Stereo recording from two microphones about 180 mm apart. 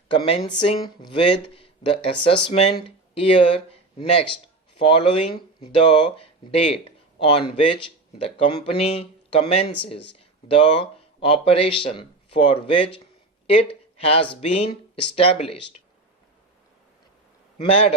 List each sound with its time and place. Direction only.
0.1 s speech: 30° left (ahead or behind)
17.6 s speech: 35° left (ahead or behind)